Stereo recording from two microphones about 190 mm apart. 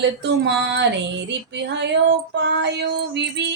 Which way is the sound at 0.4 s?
65° right (ahead or behind).